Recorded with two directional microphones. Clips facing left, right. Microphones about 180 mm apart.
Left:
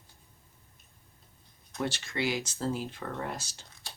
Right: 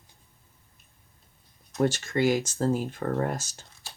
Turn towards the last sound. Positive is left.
turn(degrees=-45)  # may be behind; listen again after turning